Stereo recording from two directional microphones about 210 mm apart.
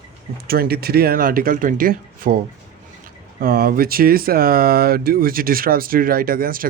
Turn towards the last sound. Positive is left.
turn(degrees=-45)  # may be behind; listen again after turning